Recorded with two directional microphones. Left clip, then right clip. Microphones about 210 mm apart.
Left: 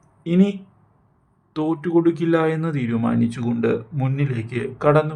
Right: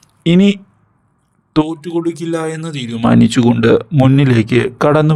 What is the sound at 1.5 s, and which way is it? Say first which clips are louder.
Speech: right 9 dB; 40° right (ahead or behind).